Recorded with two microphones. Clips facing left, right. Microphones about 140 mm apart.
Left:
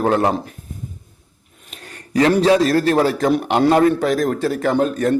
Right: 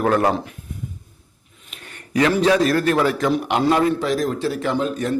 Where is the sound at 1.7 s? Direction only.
35° left (ahead or behind).